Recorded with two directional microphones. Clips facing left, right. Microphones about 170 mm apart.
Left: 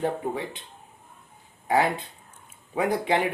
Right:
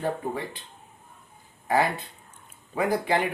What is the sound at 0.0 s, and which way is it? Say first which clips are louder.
Speech: left 1 dB; 20° left (ahead or behind).